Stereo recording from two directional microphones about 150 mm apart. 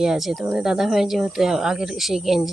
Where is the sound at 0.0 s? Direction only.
5° right (ahead or behind).